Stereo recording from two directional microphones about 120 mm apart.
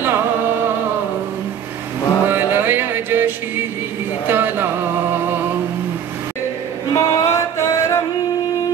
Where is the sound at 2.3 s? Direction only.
20° right (ahead or behind).